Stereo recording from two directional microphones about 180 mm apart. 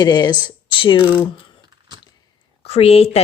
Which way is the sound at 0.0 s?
25° left (ahead or behind).